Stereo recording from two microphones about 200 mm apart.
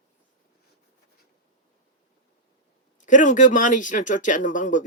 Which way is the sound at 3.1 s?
40° left (ahead or behind).